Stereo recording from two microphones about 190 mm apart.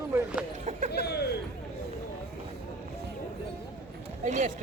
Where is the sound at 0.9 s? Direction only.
60° left (ahead or behind).